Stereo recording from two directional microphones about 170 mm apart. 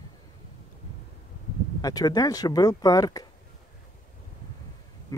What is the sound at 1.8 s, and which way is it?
Speech, 20° left (ahead or behind).